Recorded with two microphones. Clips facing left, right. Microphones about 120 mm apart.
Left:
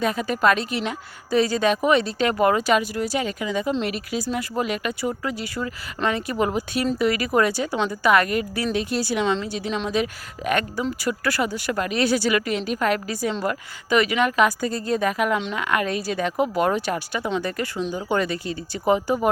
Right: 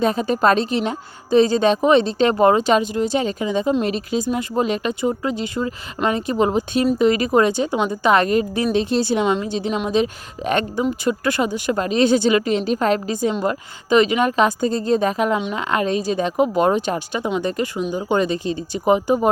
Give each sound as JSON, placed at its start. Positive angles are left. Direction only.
{"t": 0.0, "sound": "a woman's voice", "side_deg": -30}